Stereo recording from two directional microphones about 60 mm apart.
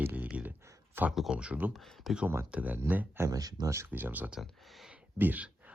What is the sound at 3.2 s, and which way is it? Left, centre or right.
Speech, right.